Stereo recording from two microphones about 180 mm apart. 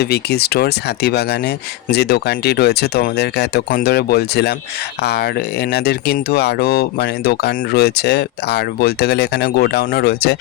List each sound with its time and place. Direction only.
0.0 s speech: 60° left (ahead or behind)